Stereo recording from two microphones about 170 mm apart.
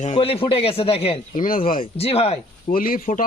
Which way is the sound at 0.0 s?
35° left (ahead or behind).